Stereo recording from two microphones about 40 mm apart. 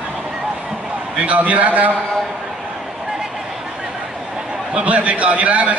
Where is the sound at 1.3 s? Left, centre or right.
Right.